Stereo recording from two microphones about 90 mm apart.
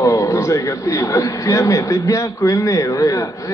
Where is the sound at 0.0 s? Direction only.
35° left (ahead or behind).